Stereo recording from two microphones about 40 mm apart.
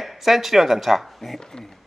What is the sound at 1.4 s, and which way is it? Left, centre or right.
Speech, centre.